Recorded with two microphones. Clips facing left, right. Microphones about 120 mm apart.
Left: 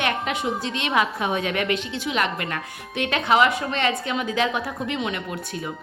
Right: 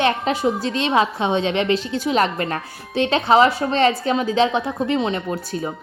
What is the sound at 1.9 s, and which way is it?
A woman's voice, 35° right (ahead or behind).